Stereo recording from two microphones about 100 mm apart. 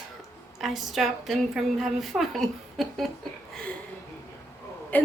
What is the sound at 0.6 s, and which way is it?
A woman's voice, centre (ahead or behind).